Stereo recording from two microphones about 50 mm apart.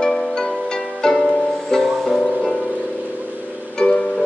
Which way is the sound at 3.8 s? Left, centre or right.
Centre.